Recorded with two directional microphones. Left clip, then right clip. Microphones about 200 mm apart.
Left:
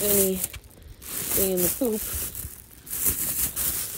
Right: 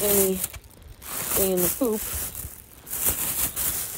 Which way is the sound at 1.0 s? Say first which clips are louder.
Right 2 dB; centre (ahead or behind).